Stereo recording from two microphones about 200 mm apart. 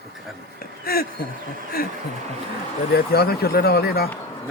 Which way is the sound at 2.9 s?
50° left (ahead or behind).